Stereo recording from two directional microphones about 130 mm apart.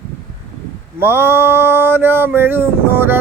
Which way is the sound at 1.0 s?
15° right (ahead or behind).